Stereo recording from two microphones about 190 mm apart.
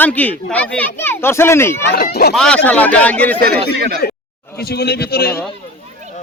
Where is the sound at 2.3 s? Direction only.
5° left (ahead or behind).